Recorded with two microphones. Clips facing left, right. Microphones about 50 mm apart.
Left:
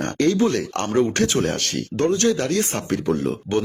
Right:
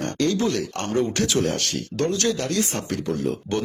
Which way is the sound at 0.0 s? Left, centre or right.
Left.